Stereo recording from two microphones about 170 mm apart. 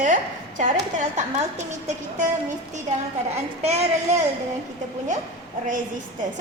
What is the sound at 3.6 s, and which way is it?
Speech, 40° right (ahead or behind).